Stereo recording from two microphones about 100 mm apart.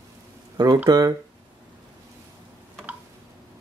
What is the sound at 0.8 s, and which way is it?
Speech, 40° right (ahead or behind).